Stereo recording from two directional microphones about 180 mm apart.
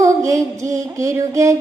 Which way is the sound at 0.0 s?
15° right (ahead or behind).